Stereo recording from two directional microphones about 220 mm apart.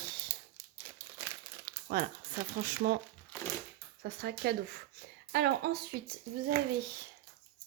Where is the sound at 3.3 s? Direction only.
10° left (ahead or behind).